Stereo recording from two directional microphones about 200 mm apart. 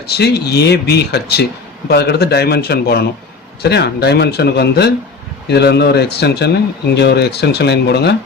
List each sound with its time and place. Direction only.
0.1 s speech: 55° left (ahead or behind)